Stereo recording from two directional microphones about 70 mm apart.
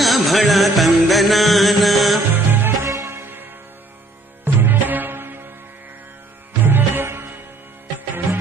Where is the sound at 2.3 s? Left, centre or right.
Right.